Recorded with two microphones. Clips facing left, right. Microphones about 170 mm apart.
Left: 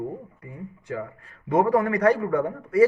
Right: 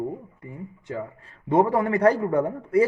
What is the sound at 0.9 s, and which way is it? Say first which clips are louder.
A man's voice: even; 25° right (ahead or behind).